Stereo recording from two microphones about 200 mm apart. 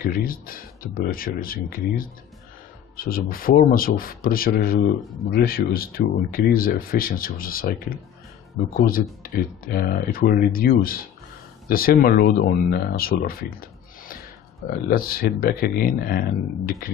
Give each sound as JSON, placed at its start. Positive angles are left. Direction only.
{"t": 0.0, "sound": "speech", "side_deg": 45}
{"t": 5.0, "sound": "speech", "side_deg": 0}
{"t": 5.3, "sound": "speech", "side_deg": 50}
{"t": 14.9, "sound": "speech", "side_deg": 45}